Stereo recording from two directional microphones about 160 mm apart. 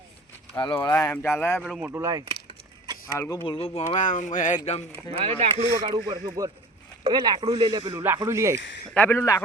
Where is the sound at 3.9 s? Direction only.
50° left (ahead or behind).